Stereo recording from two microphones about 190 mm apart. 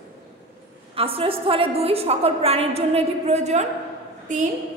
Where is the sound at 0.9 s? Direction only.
30° right (ahead or behind).